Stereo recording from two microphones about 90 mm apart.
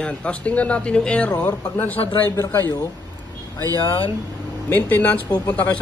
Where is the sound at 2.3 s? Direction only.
30° left (ahead or behind).